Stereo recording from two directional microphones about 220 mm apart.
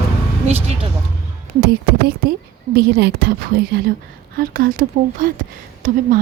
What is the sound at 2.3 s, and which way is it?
A woman's voice, 45° right (ahead or behind).